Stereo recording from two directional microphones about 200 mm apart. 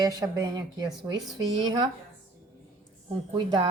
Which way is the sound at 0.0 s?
20° right (ahead or behind).